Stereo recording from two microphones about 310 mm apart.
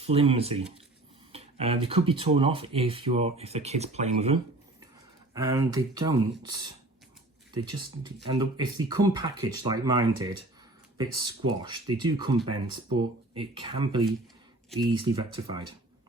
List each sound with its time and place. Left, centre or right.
0.0 s speech: centre
7.5 s speech: centre